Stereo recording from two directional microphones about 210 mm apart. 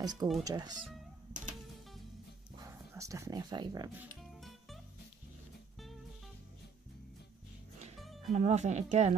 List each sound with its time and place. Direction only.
0.0 s speech: 20° right (ahead or behind)
2.5 s speech: 15° right (ahead or behind)
4.2 s music: centre (ahead or behind)
8.0 s music: centre (ahead or behind)
8.3 s speech: 35° right (ahead or behind)